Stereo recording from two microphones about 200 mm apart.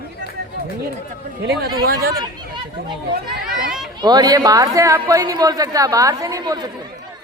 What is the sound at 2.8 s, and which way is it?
Speech, 55° right (ahead or behind).